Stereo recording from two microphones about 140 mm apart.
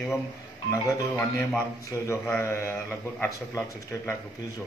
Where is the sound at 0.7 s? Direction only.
20° left (ahead or behind).